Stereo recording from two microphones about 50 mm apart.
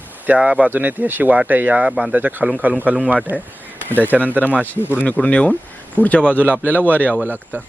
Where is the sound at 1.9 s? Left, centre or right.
Centre.